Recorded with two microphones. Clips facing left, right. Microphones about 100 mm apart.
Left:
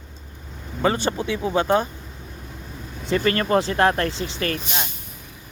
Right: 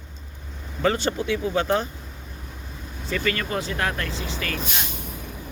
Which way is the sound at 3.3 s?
40° left (ahead or behind).